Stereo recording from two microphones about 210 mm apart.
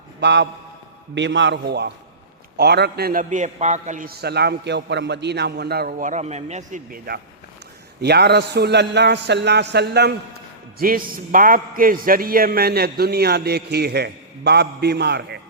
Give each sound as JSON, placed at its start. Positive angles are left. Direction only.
{"t": 0.2, "sound": "a man's voice", "side_deg": -55}